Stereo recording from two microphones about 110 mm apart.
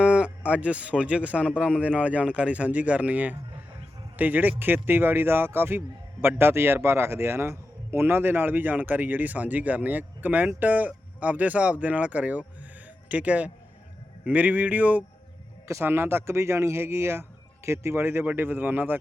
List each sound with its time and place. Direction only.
0.0 s a man's voice: 10° right (ahead or behind)